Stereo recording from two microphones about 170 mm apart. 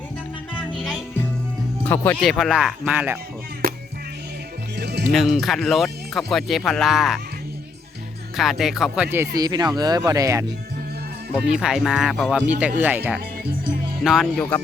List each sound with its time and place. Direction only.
0.8 s music: 5° left (ahead or behind)
1.8 s speech: 10° left (ahead or behind)
2.4 s speech: centre (ahead or behind)
3.6 s music: 65° right (ahead or behind)
4.8 s music: 75° right (ahead or behind)
5.1 s speech: centre (ahead or behind)
8.4 s speech: centre (ahead or behind)
9.0 s speech: 15° right (ahead or behind)
11.3 s speech: 5° right (ahead or behind)